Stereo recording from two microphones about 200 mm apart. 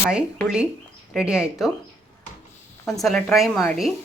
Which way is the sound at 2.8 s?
Centre (ahead or behind).